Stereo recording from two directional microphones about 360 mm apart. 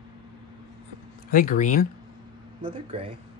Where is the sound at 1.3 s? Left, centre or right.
Left.